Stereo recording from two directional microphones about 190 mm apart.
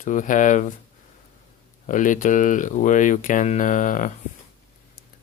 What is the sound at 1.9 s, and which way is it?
Speech, 45° left (ahead or behind).